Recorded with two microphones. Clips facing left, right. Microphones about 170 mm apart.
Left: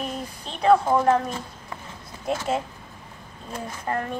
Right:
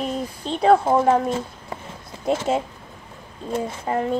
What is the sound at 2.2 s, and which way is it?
A woman's voice, 25° right (ahead or behind).